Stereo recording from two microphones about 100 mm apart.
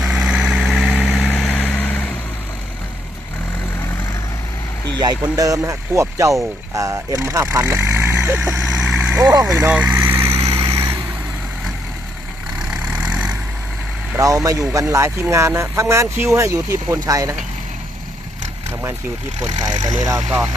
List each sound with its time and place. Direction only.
0.0 s vehicle: 5° right (ahead or behind); by 2.1 s 15° left (ahead or behind)
4.9 s speech: 40° right (ahead or behind); by 8.6 s 25° right (ahead or behind)
8.6 s vehicle: 5° right (ahead or behind)
9.2 s speech: 35° right (ahead or behind)
9.6 s vehicle: 15° right (ahead or behind); by 10.8 s 30° right (ahead or behind)
12.5 s vehicle: 10° right (ahead or behind)
14.2 s speech: 35° right (ahead or behind)
19.5 s speech: 40° right (ahead or behind)